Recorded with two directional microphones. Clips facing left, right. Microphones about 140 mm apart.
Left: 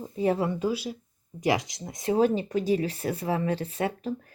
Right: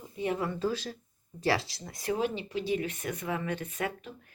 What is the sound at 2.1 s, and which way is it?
Speech, 40° left (ahead or behind).